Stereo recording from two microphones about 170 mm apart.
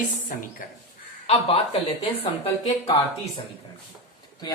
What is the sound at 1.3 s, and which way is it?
Speech, 35° left (ahead or behind).